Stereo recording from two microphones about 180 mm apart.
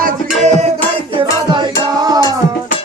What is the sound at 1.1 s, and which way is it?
Music, 25° right (ahead or behind).